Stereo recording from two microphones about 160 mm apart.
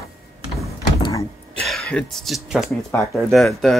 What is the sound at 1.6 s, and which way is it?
Speech, 5° left (ahead or behind).